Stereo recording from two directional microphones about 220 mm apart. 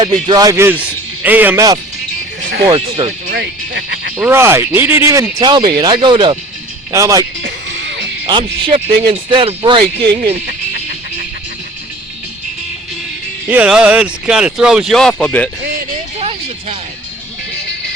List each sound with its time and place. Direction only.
0.0 s speech: 20° right (ahead or behind)
3.3 s speech: 50° right (ahead or behind)
4.2 s speech: 10° right (ahead or behind)
8.3 s speech: 20° right (ahead or behind)
13.5 s speech: 5° right (ahead or behind)
16.1 s a sound: 25° right (ahead or behind)